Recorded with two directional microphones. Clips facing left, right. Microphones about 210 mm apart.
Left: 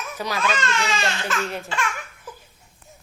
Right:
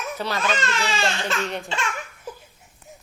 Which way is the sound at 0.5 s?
35° right (ahead or behind).